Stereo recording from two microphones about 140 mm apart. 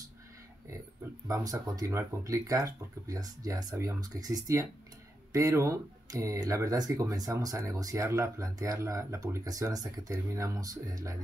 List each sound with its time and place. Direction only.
1.2 s speech: 25° right (ahead or behind)